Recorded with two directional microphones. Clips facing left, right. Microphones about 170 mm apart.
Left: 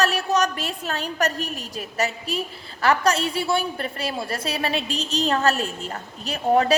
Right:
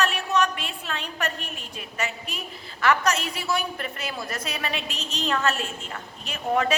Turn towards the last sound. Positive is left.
turn(degrees=35)  # may be behind; listen again after turning